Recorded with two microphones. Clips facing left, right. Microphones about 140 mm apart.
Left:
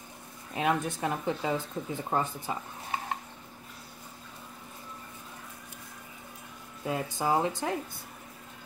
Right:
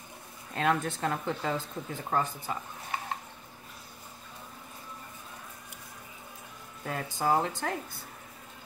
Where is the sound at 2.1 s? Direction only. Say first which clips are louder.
Right 1 dB; 25° left (ahead or behind).